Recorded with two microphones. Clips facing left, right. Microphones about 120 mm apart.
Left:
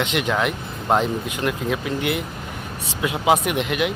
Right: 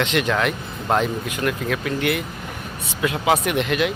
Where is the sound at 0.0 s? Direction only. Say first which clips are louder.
Right 1 dB; 15° left (ahead or behind).